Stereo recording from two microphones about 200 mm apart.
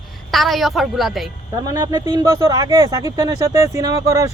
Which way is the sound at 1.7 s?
20° right (ahead or behind).